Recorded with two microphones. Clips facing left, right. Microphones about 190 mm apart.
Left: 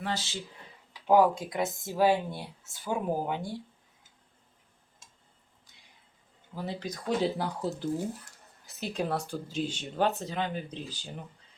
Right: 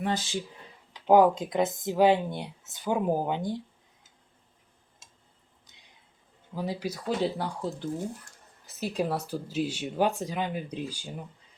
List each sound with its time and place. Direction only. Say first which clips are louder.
0.0 s speech: right 5 dB; 20° right (ahead or behind)
6.6 s speech: right 4 dB; 10° right (ahead or behind)
7.2 s speech: even; centre (ahead or behind)